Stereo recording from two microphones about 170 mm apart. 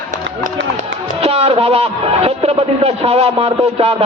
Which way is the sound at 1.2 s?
35° right (ahead or behind).